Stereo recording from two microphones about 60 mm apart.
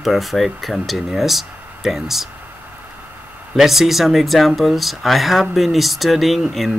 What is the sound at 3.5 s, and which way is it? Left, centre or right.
Speech, centre.